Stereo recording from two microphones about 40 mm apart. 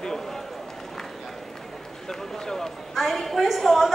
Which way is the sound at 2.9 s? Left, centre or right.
Centre.